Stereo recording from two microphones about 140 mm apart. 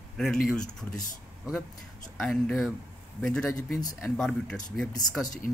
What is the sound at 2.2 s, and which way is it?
Speech, 5° left (ahead or behind).